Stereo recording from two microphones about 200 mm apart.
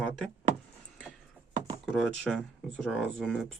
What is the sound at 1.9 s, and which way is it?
Speech, centre (ahead or behind).